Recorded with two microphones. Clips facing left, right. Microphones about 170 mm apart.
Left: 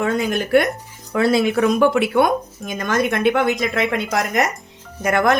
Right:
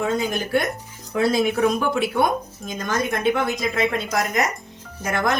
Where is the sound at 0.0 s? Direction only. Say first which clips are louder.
Left 3 dB; 65° left (ahead or behind).